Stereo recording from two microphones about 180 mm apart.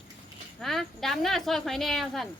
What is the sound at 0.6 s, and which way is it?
Speech, centre (ahead or behind).